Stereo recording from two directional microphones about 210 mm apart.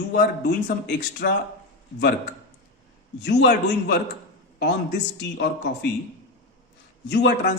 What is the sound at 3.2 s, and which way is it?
A man's voice, 55° left (ahead or behind).